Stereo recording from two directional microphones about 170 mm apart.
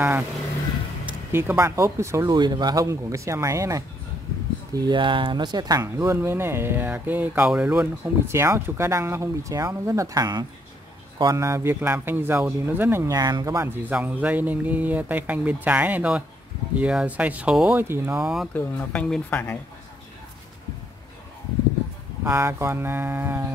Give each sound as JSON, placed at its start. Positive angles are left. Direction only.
{"t": 1.0, "sound": "speech", "side_deg": -15}
{"t": 18.5, "sound": "speech", "side_deg": 10}
{"t": 22.2, "sound": "speech", "side_deg": -15}